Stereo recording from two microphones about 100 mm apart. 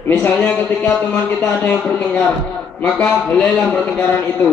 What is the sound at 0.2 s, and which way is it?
Speech, 15° left (ahead or behind).